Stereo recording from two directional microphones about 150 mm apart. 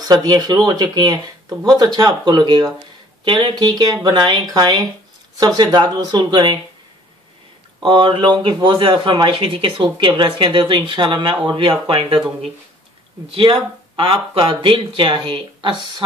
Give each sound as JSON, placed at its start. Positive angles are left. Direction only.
{"t": 0.0, "sound": "speech", "side_deg": -25}
{"t": 7.8, "sound": "speech", "side_deg": -35}
{"t": 13.3, "sound": "speech", "side_deg": -35}